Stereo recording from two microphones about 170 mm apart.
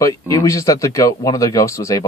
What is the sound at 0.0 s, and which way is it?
Speech, 20° left (ahead or behind).